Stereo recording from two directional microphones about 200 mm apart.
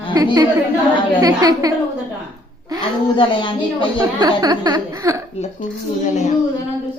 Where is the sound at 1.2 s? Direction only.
15° right (ahead or behind).